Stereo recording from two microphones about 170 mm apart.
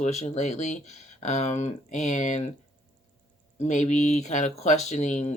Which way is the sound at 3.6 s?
45° left (ahead or behind).